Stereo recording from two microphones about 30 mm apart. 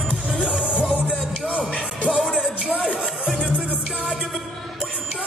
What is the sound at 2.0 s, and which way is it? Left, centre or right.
Music, right.